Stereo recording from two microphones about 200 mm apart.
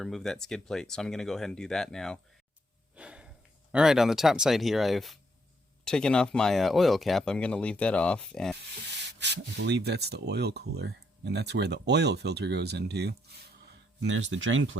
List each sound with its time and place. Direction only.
0.0 s speech: centre (ahead or behind)
9.1 s speech: 60° right (ahead or behind)
14.0 s speech: 65° right (ahead or behind)